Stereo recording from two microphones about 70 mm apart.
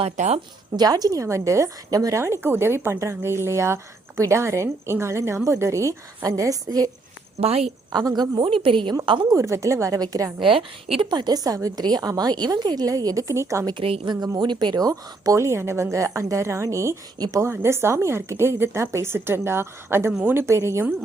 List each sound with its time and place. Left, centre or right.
0.8 s a woman's voice: right
2.2 s a woman's voice: right
7.9 s a woman's voice: right
9.0 s a woman's voice: right
10.0 s a woman's voice: right
11.1 s a woman's voice: right
13.7 s a woman's voice: right
17.2 s a woman's voice: right
17.4 s a woman's voice: right